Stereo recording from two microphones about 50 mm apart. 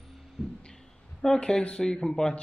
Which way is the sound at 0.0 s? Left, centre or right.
Centre.